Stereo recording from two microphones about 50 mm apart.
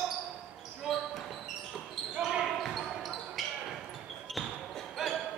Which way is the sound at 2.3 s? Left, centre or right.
Centre.